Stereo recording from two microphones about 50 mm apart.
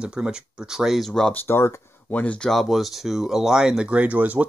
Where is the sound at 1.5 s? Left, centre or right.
Left.